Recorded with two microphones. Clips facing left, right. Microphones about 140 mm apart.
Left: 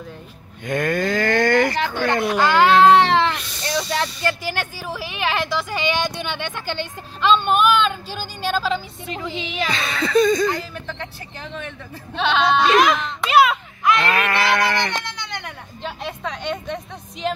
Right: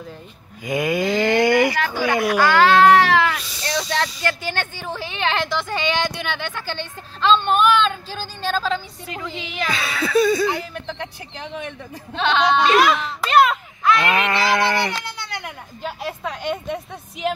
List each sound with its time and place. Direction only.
0.7 s speech: 10° right (ahead or behind)
2.2 s speech: 20° left (ahead or behind)
2.8 s a sound: 20° left (ahead or behind)
3.3 s speech: centre (ahead or behind)
9.3 s speech: 25° left (ahead or behind)
9.7 s speech: 5° right (ahead or behind)
12.1 s sheep: 5° left (ahead or behind)
12.9 s a sound: centre (ahead or behind)
14.0 s a sound: 20° right (ahead or behind)
15.0 s speech: 5° right (ahead or behind)